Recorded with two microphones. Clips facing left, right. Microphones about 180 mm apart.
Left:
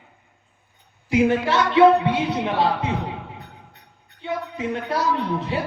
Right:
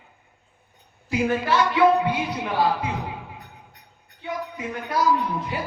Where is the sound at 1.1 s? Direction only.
25° left (ahead or behind).